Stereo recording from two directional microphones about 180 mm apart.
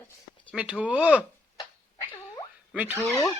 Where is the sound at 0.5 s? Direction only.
5° right (ahead or behind).